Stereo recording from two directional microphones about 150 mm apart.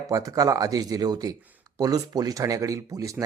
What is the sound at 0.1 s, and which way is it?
Speech, 25° right (ahead or behind).